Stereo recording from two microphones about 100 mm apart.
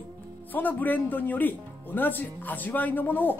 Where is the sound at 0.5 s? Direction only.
20° left (ahead or behind).